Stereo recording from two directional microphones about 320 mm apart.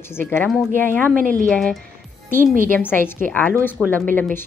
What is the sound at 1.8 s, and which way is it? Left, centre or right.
Music, right.